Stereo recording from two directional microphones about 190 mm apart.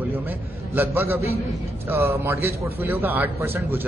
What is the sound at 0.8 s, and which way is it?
A man's voice, 10° right (ahead or behind).